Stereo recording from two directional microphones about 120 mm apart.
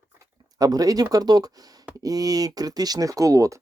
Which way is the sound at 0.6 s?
30° right (ahead or behind).